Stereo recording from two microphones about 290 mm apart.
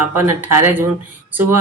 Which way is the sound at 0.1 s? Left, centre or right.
Centre.